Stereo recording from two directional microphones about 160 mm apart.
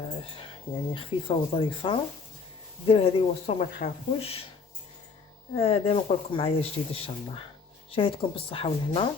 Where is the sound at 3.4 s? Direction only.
55° left (ahead or behind); by 4.4 s 40° left (ahead or behind).